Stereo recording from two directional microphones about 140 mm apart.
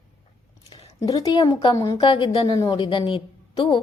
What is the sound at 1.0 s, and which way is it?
A woman's voice, 25° left (ahead or behind).